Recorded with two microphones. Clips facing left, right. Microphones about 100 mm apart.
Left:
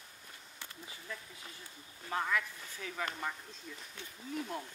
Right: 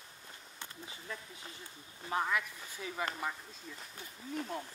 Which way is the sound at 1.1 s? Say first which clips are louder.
Right 1 dB; 30° right (ahead or behind).